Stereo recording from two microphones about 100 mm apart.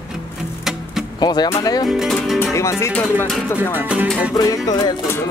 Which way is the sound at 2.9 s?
15° left (ahead or behind).